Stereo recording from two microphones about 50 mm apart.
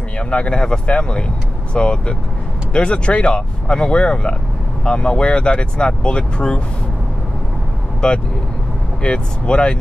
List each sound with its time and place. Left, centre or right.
0.3 s speech: left
8.0 s speech: centre